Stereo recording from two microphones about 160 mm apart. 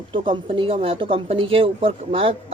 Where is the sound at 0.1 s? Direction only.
30° right (ahead or behind).